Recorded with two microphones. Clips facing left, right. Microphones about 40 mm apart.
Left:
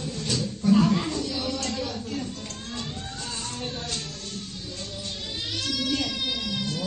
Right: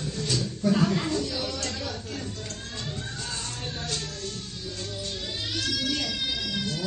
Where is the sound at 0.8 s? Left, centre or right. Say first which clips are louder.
Left 1 dB; left.